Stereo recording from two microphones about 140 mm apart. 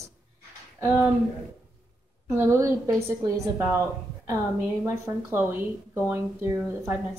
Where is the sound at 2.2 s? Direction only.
20° right (ahead or behind).